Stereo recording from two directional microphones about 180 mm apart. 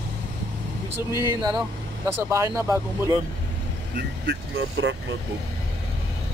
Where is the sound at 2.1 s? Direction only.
15° right (ahead or behind).